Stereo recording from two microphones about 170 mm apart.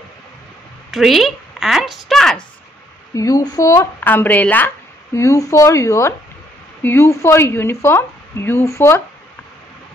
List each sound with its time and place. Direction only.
0.9 s a woman's voice: centre (ahead or behind)
3.2 s a woman's voice: 20° left (ahead or behind)